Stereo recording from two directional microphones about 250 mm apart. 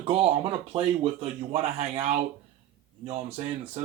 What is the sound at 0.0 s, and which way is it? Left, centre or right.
Speech, right.